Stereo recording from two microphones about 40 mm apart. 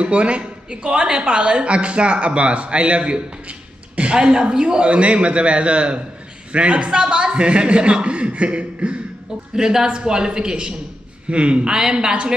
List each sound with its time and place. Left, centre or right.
0.0 s a woman's voice: right
9.6 s a woman's voice: centre